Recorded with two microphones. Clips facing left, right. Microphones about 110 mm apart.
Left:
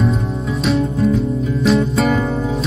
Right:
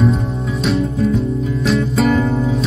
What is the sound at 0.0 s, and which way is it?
Music, centre (ahead or behind).